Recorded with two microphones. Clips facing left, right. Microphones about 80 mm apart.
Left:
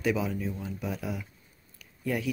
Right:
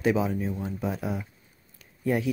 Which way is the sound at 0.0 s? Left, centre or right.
Right.